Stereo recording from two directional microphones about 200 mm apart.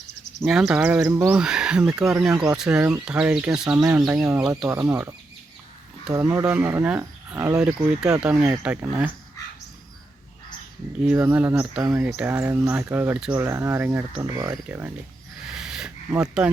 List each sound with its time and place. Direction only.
0.4 s speech: 5° right (ahead or behind)
11.0 s speech: 5° right (ahead or behind)
15.4 s a sound: 5° right (ahead or behind)